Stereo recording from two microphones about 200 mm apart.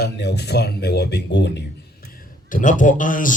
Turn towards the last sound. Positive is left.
turn(degrees=40)  # may be behind; listen again after turning